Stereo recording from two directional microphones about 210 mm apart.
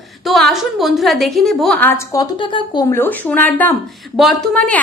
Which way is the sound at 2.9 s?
10° left (ahead or behind).